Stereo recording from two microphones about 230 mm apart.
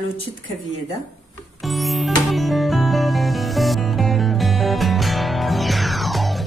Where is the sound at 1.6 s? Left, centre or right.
Centre.